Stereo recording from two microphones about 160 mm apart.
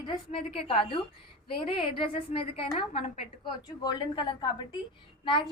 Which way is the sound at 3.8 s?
30° left (ahead or behind).